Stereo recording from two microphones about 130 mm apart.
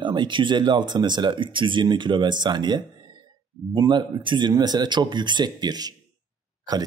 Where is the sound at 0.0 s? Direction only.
35° right (ahead or behind).